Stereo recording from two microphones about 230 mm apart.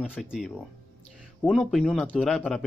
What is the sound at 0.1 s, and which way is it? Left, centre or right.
Speech, centre.